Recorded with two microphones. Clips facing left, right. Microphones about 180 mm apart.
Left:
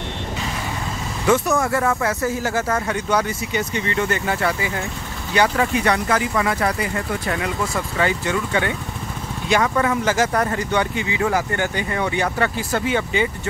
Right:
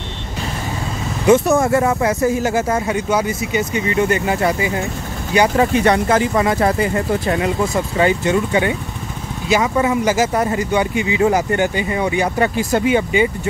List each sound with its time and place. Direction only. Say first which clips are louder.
1.2 s speech: right 6 dB; 25° right (ahead or behind)